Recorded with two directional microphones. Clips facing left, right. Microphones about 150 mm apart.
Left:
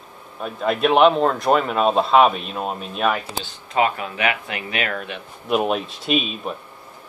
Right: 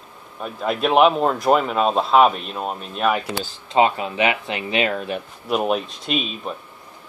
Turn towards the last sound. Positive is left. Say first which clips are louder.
# left 3 dB
turn(degrees=5)  # may be behind; listen again after turning